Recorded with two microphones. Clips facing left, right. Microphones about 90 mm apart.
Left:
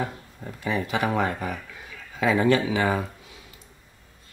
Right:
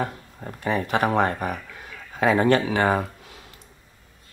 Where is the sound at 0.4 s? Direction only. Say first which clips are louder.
Right 2 dB; 50° right (ahead or behind).